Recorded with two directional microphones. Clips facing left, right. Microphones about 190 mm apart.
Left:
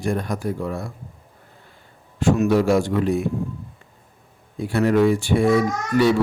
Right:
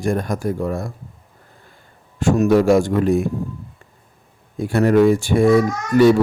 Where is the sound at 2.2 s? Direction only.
45° right (ahead or behind).